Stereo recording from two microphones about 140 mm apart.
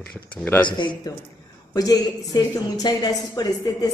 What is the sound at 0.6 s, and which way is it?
A woman's voice, 35° left (ahead or behind).